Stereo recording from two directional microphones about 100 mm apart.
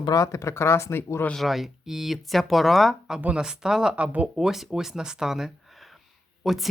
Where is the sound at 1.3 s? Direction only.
Centre (ahead or behind).